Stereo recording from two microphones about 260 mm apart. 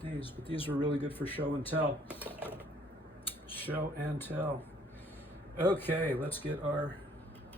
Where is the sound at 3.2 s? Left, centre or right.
Left.